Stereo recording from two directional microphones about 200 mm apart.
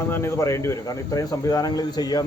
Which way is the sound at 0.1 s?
15° left (ahead or behind).